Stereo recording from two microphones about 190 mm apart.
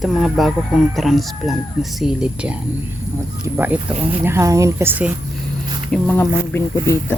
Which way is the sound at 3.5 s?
15° right (ahead or behind).